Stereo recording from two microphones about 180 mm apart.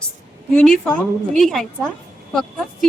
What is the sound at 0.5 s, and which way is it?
A woman's voice, 5° left (ahead or behind).